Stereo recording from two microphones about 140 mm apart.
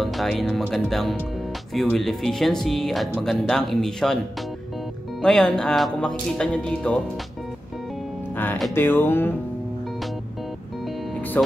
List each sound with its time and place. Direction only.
0.0 s speech: centre (ahead or behind)
5.2 s speech: 5° left (ahead or behind)
8.7 s music: 15° left (ahead or behind)
11.4 s speech: 10° left (ahead or behind)